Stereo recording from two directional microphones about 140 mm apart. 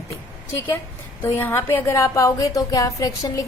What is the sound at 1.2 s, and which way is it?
A woman's voice, 15° left (ahead or behind).